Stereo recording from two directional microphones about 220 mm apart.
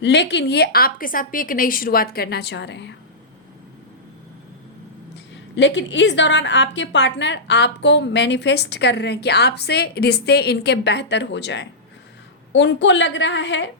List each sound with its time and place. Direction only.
0.0 s a woman's voice: 50° left (ahead or behind)
5.5 s a woman's voice: 55° left (ahead or behind)